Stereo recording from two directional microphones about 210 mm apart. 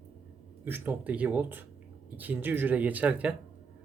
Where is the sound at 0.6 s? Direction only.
10° right (ahead or behind).